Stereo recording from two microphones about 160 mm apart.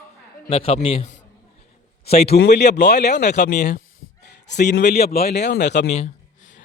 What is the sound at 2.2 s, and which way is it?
Speech, 90° left.